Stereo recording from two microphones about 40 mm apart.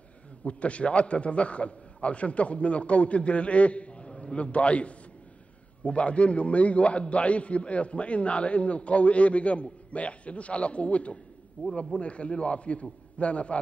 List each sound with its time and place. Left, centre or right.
0.4 s a man's voice: left